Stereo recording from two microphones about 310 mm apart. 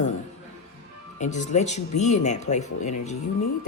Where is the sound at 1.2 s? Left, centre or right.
Left.